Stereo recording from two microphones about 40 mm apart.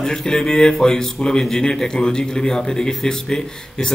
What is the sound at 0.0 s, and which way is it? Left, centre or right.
Speech, centre.